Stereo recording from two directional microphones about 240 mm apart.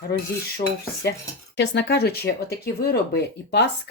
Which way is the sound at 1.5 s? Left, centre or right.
Left.